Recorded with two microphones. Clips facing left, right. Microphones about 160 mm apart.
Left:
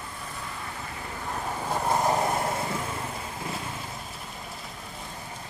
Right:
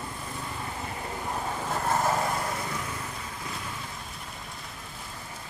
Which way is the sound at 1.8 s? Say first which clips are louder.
Left 2 dB; 15° left (ahead or behind).